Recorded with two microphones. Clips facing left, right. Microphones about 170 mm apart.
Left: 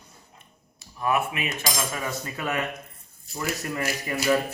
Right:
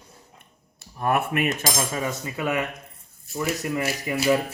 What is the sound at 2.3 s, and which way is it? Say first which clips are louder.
Speech: right 4 dB; 15° right (ahead or behind).